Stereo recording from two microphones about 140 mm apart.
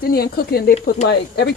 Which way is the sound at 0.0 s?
90° left.